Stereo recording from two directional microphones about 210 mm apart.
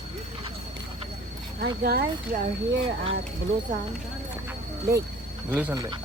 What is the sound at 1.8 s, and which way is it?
Speech, 50° right (ahead or behind).